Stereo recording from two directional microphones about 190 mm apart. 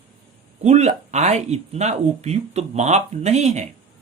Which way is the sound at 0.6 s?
35° right (ahead or behind).